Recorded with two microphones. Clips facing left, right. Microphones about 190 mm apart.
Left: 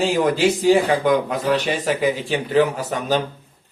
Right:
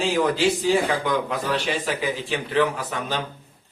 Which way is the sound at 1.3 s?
40° left (ahead or behind).